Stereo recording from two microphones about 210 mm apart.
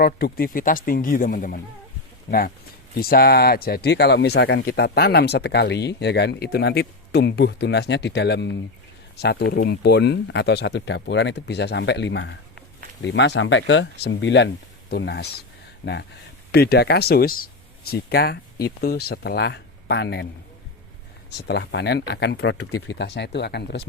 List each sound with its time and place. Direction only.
0.0 s speech: 45° left (ahead or behind)
2.9 s speech: 45° left (ahead or behind)
21.2 s speech: 50° left (ahead or behind)
22.5 s speech: 90° left
23.0 s speech: 55° left (ahead or behind)